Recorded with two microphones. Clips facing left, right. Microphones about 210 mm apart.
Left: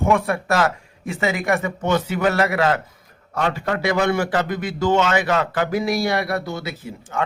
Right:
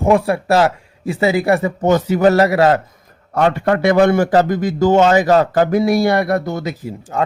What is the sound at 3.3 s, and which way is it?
A man's voice, 55° right (ahead or behind).